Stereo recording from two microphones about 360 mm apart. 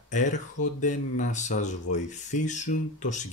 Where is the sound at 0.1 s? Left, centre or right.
Centre.